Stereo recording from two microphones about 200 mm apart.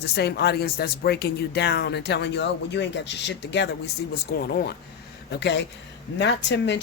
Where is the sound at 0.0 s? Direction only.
55° left (ahead or behind).